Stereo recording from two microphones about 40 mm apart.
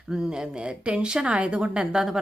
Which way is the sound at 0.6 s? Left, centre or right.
Right.